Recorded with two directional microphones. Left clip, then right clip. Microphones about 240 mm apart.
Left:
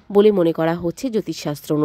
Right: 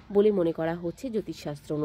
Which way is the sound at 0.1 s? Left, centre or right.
Left.